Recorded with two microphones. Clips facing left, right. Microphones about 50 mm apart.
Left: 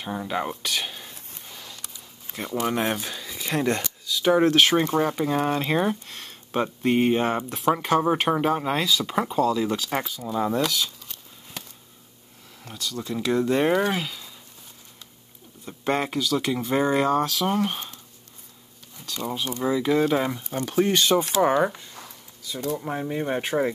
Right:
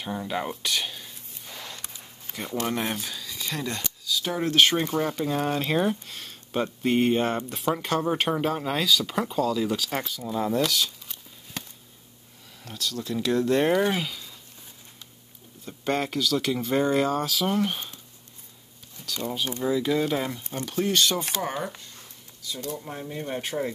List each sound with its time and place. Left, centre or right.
0.0 s speech: centre
1.8 s a sound: right
2.3 s speech: centre
3.0 s a sound: left
4.1 s speech: left
4.6 s speech: centre
12.6 s speech: centre
15.6 s speech: centre
18.9 s speech: centre
22.5 s speech: left